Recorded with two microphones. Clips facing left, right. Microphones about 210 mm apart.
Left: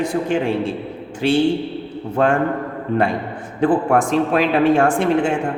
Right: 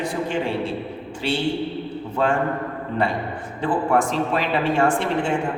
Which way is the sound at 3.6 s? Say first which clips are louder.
Left 5 dB; 50° left (ahead or behind).